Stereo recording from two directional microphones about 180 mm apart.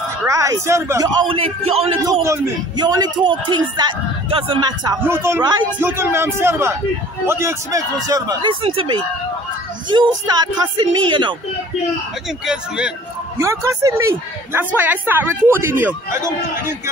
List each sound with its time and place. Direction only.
0.2 s speech: 20° right (ahead or behind)
1.4 s a man's voice: 35° right (ahead or behind)
2.0 s a man's voice: 20° right (ahead or behind)
5.7 s a man's voice: 10° right (ahead or behind)
12.3 s speech: 5° right (ahead or behind)
13.4 s speech: 15° right (ahead or behind)